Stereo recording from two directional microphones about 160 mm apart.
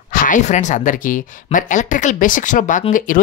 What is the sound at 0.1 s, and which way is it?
A woman's voice, 55° left (ahead or behind).